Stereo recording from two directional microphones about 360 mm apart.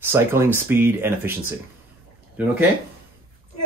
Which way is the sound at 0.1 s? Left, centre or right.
Centre.